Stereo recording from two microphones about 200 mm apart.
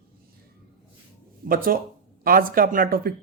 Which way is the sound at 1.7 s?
45° right (ahead or behind).